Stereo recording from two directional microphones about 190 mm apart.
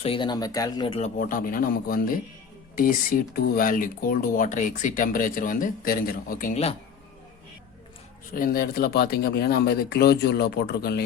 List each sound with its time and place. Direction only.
0.0 s speech: 25° left (ahead or behind)
0.9 s speech: 40° left (ahead or behind)
3.3 s speech: 55° left (ahead or behind); by 6.7 s 35° left (ahead or behind)
8.3 s speech: 50° left (ahead or behind)